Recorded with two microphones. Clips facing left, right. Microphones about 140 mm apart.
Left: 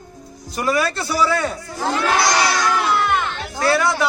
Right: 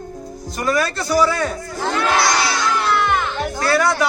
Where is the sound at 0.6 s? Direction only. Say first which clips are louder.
Even; 5° left (ahead or behind).